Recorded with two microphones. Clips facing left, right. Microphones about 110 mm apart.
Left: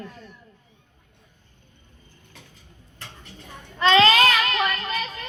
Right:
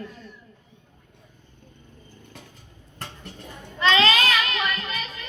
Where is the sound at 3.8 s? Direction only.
35° left (ahead or behind).